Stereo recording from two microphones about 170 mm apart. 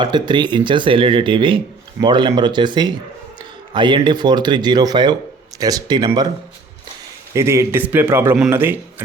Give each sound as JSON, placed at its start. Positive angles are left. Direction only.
{"t": 0.0, "sound": "speech", "side_deg": -25}
{"t": 7.3, "sound": "a man's voice", "side_deg": -15}